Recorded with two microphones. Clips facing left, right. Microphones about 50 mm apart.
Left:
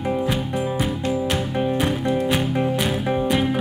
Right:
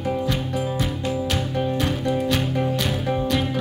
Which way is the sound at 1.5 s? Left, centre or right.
Left.